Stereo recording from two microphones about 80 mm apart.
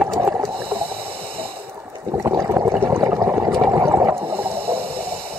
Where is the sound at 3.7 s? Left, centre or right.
Right.